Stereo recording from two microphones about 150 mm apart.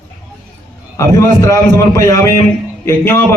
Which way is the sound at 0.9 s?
20° left (ahead or behind).